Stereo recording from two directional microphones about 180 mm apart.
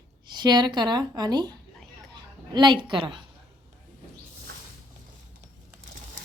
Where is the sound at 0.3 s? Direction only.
25° right (ahead or behind).